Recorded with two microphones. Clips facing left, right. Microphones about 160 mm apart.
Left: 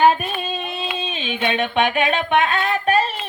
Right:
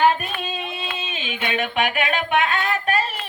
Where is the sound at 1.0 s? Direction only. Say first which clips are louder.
Left 7 dB; 30° left (ahead or behind).